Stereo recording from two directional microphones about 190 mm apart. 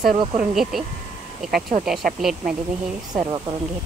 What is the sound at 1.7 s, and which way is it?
Speech, 45° right (ahead or behind).